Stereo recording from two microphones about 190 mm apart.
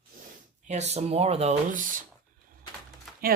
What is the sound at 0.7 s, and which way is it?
Speech, 35° right (ahead or behind).